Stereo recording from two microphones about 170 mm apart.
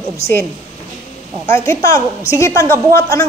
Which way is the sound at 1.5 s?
15° left (ahead or behind).